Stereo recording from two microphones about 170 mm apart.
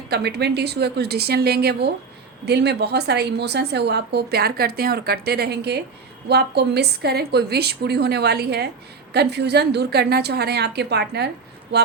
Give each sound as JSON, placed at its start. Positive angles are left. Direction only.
{"t": 0.1, "sound": "a woman's voice", "side_deg": -75}